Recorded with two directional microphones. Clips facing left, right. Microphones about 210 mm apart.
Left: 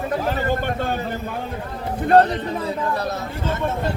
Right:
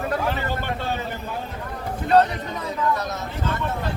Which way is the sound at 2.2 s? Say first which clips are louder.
Left 3 dB; 30° left (ahead or behind).